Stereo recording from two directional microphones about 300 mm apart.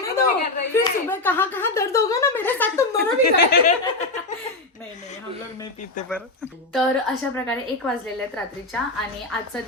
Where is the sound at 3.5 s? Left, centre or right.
Left.